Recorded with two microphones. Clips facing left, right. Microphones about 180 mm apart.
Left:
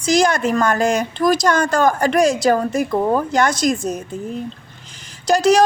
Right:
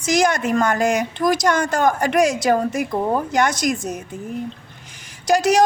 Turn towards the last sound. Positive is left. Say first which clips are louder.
# left 2 dB
turn(degrees=-15)  # may be behind; listen again after turning